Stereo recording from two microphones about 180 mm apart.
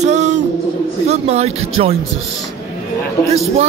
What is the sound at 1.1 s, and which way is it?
Speech, 35° right (ahead or behind).